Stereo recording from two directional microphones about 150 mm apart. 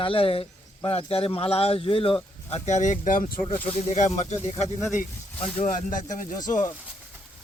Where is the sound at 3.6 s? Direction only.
45° left (ahead or behind).